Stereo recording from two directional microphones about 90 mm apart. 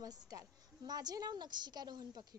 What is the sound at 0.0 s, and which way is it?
A woman's voice, 45° right (ahead or behind).